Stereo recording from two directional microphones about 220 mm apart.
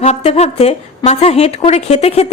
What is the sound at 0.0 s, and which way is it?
A woman's voice, 30° left (ahead or behind).